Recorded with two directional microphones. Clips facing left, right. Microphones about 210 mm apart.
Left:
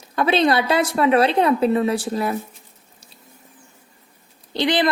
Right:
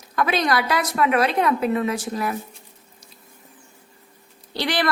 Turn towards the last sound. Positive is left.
turn(degrees=20)  # may be behind; listen again after turning